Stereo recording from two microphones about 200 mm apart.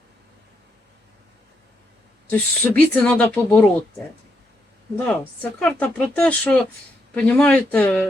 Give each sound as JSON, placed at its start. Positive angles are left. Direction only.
{"t": 2.3, "sound": "speech", "side_deg": 10}
{"t": 5.0, "sound": "speech", "side_deg": 5}